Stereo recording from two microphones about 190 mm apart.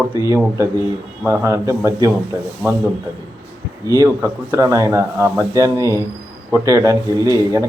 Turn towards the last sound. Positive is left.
turn(degrees=-15)  # may be behind; listen again after turning